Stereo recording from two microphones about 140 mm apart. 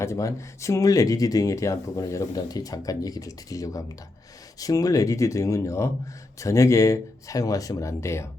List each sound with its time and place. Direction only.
0.0 s speech: 20° left (ahead or behind)